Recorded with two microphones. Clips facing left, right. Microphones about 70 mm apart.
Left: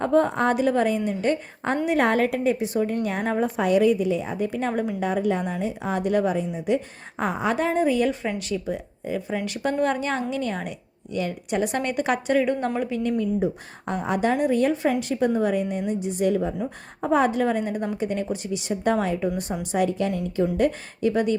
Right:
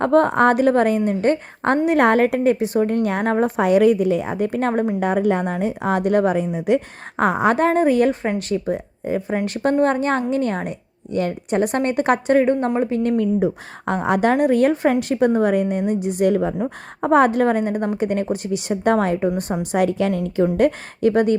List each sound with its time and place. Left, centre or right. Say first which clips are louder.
0.0 s a woman's voice: right 5 dB; right
13.0 s a woman's voice: right 3 dB; right
19.7 s a woman's voice: right 4 dB; right